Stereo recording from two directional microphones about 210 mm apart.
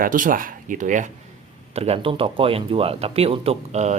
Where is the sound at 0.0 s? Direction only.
40° right (ahead or behind).